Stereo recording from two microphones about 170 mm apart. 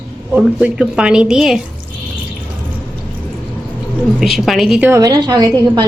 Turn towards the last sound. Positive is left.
turn(degrees=-25)  # may be behind; listen again after turning